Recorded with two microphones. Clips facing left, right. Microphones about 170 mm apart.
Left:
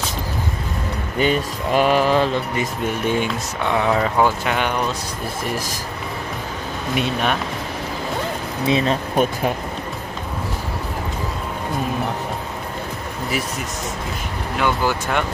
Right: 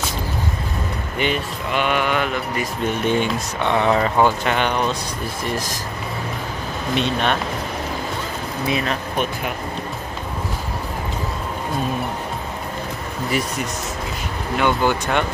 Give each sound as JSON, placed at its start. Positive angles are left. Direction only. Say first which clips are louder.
{"t": 1.2, "sound": "speech", "louder": "left 4 dB", "side_deg": 40}
{"t": 3.1, "sound": "speech", "louder": "right 1 dB", "side_deg": 5}
{"t": 7.0, "sound": "speech", "louder": "even", "side_deg": 5}
{"t": 8.6, "sound": "speech", "louder": "left 4 dB", "side_deg": 25}
{"t": 14.6, "sound": "speech", "louder": "right 2 dB", "side_deg": 5}